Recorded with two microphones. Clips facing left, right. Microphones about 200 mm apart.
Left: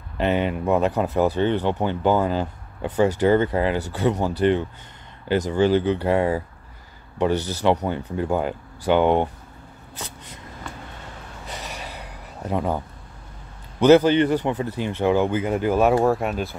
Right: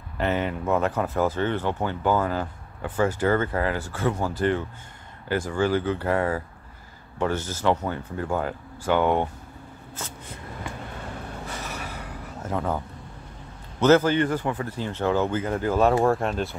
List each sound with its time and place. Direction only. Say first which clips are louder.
0.2 s speech: left 4 dB; 20° left (ahead or behind)
11.6 s a sound: right 1 dB; 15° left (ahead or behind)
13.7 s a man's voice: left 4 dB; 15° left (ahead or behind)